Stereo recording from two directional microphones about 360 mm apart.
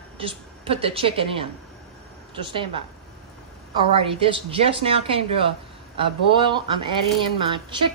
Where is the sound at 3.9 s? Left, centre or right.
Centre.